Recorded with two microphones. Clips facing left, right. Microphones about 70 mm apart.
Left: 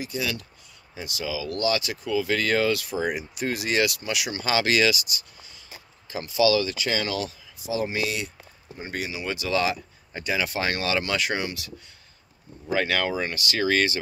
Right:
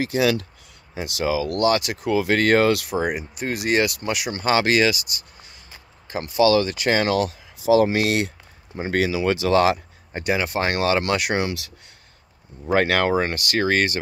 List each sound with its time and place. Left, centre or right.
0.0 s speech: right
0.9 s speech: right
3.2 s speech: right
6.0 s speech: right
8.7 s speech: right
9.5 s speech: right
12.7 s speech: right